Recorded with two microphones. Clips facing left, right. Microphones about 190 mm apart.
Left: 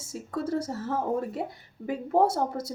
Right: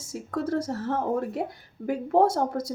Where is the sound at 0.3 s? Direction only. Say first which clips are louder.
Right 2 dB; 5° left (ahead or behind).